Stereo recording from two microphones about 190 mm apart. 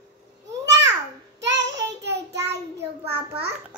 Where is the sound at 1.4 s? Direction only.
70° right (ahead or behind).